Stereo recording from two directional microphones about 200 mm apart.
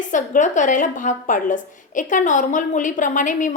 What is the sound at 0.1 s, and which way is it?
A woman's voice, 40° left (ahead or behind).